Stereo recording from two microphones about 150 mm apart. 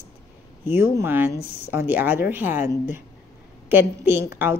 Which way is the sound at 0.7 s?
15° right (ahead or behind).